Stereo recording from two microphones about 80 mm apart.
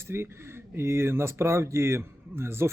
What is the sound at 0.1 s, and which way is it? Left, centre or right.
Speech, right.